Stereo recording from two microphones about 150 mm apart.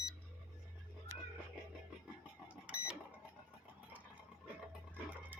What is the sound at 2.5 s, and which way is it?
Printer, 10° right (ahead or behind).